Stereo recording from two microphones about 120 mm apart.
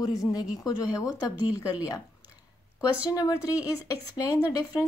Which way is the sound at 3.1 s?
30° left (ahead or behind).